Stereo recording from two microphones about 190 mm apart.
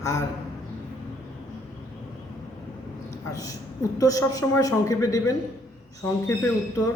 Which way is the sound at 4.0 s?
20° left (ahead or behind).